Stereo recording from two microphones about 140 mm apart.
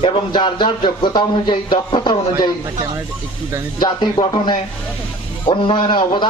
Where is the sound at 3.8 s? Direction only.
30° left (ahead or behind).